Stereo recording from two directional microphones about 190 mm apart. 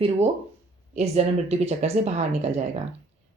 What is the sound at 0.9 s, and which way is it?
Speech, 35° right (ahead or behind).